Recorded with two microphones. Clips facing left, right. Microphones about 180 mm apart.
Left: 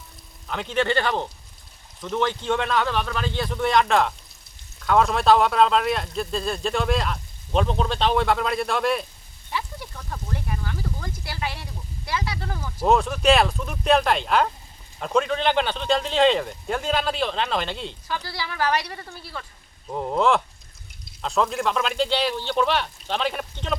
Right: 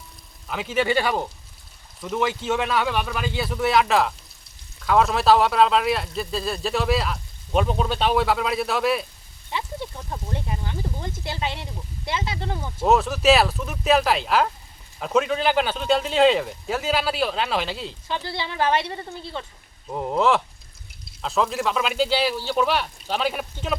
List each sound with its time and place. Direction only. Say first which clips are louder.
0.4 s speech: right 1 dB; 5° right (ahead or behind)
9.5 s speech: right 2 dB; 25° right (ahead or behind)
12.8 s speech: right 1 dB; 5° right (ahead or behind)
18.1 s speech: right 3 dB; 25° right (ahead or behind)
19.9 s speech: even; 5° right (ahead or behind)